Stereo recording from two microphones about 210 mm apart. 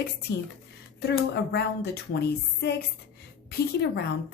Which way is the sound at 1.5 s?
50° left (ahead or behind).